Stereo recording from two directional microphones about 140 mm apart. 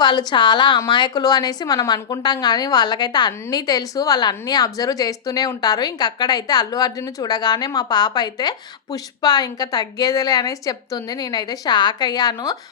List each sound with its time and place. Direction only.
0.0 s a woman's voice: 30° left (ahead or behind)